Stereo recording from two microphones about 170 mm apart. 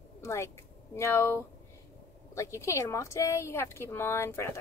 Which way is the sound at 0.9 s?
15° left (ahead or behind).